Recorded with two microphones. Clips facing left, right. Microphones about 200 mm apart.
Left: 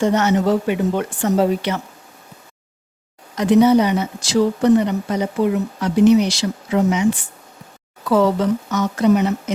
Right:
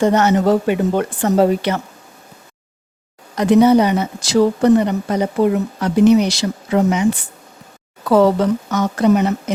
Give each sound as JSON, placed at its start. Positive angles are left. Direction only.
{"t": 0.0, "sound": "speech", "side_deg": -50}
{"t": 3.3, "sound": "speech", "side_deg": -55}
{"t": 8.0, "sound": "speech", "side_deg": -40}
{"t": 8.4, "sound": "speech", "side_deg": -50}